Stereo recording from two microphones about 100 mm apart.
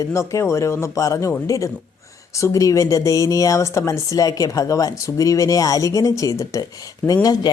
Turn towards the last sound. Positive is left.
turn(degrees=40)  # may be behind; listen again after turning